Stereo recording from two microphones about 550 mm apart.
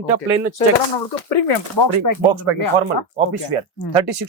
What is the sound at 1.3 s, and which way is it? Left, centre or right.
Speech, left.